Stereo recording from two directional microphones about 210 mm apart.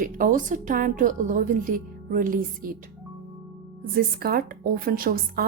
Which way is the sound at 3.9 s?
45° right (ahead or behind).